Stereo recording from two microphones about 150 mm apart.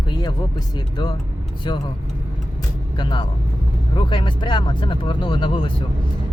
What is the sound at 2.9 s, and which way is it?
Speech, 30° left (ahead or behind).